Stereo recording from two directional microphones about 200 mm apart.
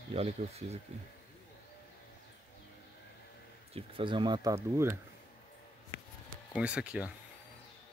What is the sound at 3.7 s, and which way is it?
Speech, 25° right (ahead or behind).